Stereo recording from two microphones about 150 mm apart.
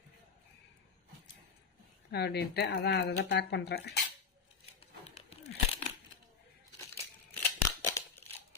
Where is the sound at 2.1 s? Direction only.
90° left.